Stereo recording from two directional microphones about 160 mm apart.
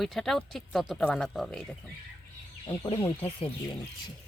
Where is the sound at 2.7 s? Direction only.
35° left (ahead or behind).